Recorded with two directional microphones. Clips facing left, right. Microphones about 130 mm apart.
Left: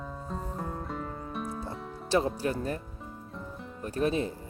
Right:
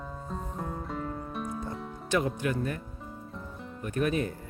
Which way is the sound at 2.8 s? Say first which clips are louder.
Right 1 dB; centre (ahead or behind).